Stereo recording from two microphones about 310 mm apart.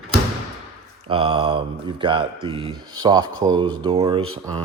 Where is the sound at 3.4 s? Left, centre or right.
Centre.